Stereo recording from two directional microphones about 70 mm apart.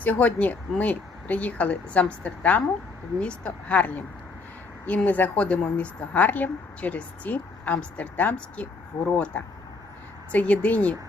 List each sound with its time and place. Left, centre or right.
0.0 s a woman's voice: left